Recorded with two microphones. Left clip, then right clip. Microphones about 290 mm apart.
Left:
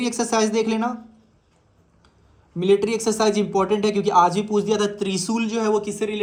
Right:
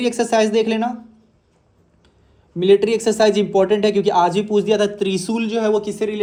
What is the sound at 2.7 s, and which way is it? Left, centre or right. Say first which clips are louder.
Speech: right 5 dB; centre.